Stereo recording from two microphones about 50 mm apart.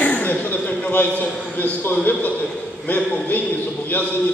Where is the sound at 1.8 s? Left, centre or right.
Left.